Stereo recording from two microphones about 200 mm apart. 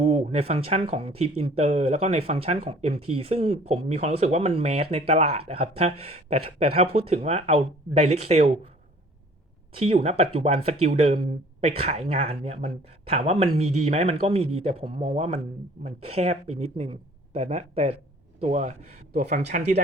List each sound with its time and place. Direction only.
0.0 s speech: 30° right (ahead or behind)
9.7 s speech: 30° right (ahead or behind)